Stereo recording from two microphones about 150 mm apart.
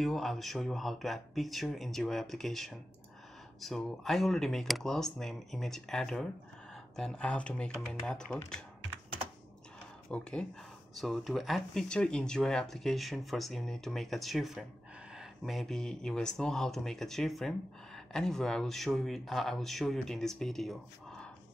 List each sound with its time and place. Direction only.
0.0 s speech: centre (ahead or behind)
10.0 s speech: 5° left (ahead or behind)